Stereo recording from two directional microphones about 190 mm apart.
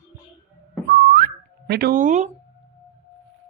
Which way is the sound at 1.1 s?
50° right (ahead or behind).